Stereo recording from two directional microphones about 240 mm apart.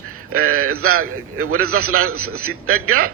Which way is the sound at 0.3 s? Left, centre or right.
Right.